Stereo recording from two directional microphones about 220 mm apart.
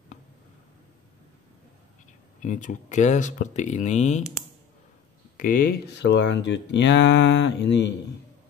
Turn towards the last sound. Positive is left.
turn(degrees=55)  # may be behind; listen again after turning